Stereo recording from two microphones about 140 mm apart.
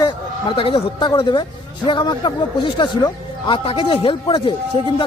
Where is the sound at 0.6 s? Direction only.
40° left (ahead or behind).